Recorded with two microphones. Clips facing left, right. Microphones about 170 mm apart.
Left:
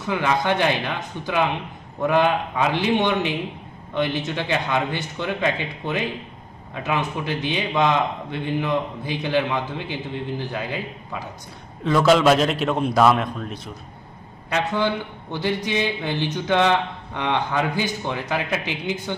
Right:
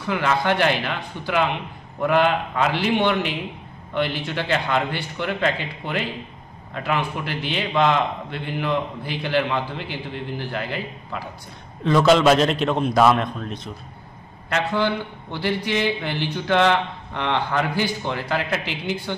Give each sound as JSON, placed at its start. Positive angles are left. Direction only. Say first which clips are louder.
{"t": 0.0, "sound": "speech", "louder": "even", "side_deg": 15}
{"t": 11.8, "sound": "a man's voice", "louder": "right 1 dB", "side_deg": 5}
{"t": 14.5, "sound": "speech", "louder": "even", "side_deg": 15}